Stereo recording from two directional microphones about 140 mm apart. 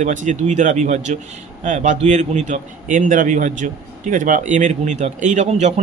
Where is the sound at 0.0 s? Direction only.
60° right (ahead or behind).